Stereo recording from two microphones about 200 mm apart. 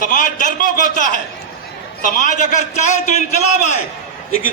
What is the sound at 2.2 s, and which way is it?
A man's voice, 40° left (ahead or behind).